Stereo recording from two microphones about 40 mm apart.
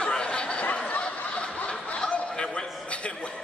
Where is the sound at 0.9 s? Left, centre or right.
Left.